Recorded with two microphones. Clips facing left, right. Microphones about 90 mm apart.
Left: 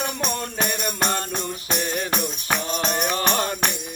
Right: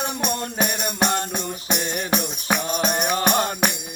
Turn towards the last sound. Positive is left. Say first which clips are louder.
# right 2 dB
turn(degrees=-20)  # may be behind; listen again after turning